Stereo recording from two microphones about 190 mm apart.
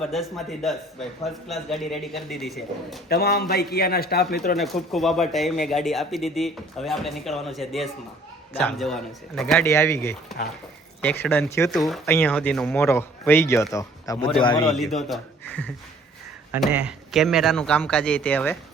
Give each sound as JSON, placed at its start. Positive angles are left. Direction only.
{"t": 0.1, "sound": "speech", "side_deg": 0}
{"t": 3.1, "sound": "a man's voice", "side_deg": 55}
{"t": 4.5, "sound": "speech", "side_deg": 0}
{"t": 9.6, "sound": "speech", "side_deg": 15}
{"t": 11.7, "sound": "speech", "side_deg": 0}
{"t": 14.7, "sound": "speech", "side_deg": 0}
{"t": 16.5, "sound": "speech", "side_deg": -5}